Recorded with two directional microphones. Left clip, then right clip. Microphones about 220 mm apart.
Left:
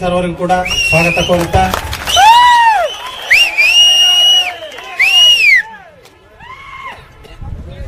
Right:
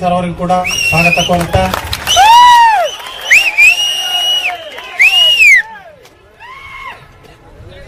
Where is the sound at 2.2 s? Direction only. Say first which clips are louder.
Right 2 dB; centre (ahead or behind).